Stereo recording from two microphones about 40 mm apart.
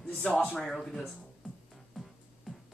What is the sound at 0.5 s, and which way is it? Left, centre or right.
Speech, centre.